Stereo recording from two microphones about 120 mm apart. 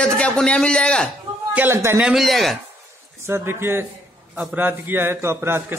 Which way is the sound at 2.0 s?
Centre (ahead or behind).